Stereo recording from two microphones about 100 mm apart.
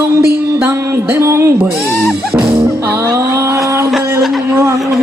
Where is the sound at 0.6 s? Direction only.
20° right (ahead or behind).